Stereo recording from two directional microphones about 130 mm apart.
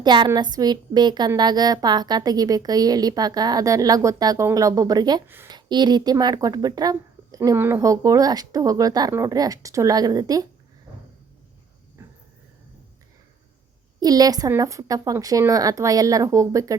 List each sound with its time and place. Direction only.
0.0 s a woman's voice: 35° right (ahead or behind)
5.2 s speech: 15° right (ahead or behind)
5.5 s a woman's voice: 35° right (ahead or behind)
14.0 s a woman's voice: 30° right (ahead or behind)